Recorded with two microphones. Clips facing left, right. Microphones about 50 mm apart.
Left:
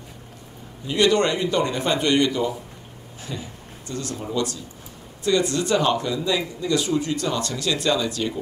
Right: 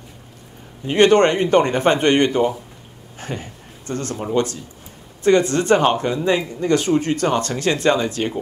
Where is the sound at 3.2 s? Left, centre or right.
Right.